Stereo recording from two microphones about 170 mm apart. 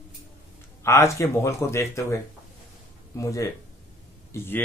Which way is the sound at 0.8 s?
15° left (ahead or behind).